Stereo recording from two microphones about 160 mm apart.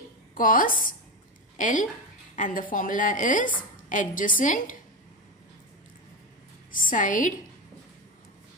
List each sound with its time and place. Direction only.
0.3 s a woman's voice: 60° left (ahead or behind)
6.8 s a woman's voice: 55° left (ahead or behind)